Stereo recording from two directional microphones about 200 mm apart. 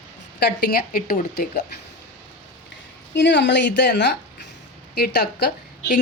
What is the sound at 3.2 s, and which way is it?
A woman's voice, 60° left (ahead or behind).